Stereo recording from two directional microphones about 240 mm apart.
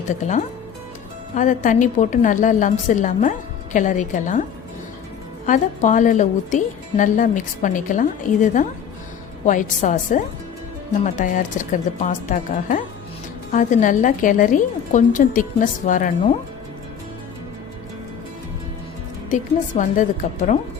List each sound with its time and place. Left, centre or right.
0.1 s a woman's voice: left
5.5 s a woman's voice: left
19.3 s a woman's voice: left